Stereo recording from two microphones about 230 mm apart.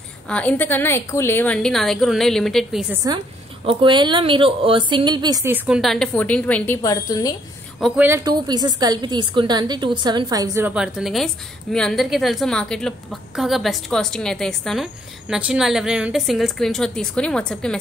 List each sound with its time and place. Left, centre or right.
0.3 s a woman's voice: centre
3.6 s a woman's voice: centre
7.8 s a woman's voice: centre